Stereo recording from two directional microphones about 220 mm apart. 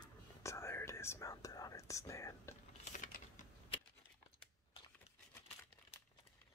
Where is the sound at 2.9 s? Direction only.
35° left (ahead or behind).